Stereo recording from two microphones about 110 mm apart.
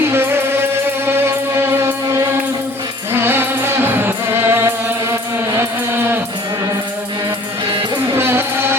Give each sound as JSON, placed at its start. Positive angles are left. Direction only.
{"t": 0.0, "sound": "music", "side_deg": -20}
{"t": 3.1, "sound": "music", "side_deg": -20}
{"t": 8.1, "sound": "music", "side_deg": -20}